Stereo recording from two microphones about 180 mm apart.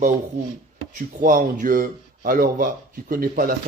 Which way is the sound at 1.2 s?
45° right (ahead or behind).